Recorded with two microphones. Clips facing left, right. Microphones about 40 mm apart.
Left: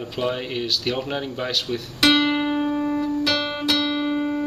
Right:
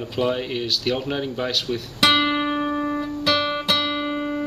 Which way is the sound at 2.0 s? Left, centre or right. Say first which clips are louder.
Even; centre.